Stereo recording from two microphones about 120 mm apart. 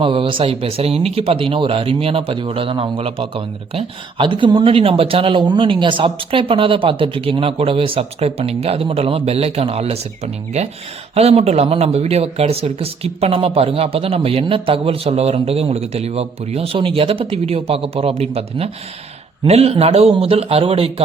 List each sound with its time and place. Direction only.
0.0 s speech: 50° right (ahead or behind)
11.1 s speech: 60° right (ahead or behind)